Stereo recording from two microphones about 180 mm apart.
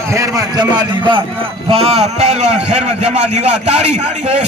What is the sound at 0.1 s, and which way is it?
A man's voice, 15° right (ahead or behind).